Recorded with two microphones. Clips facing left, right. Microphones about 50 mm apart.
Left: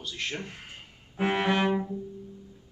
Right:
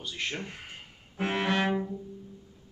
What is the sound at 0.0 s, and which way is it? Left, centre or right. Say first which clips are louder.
Speech: even; centre.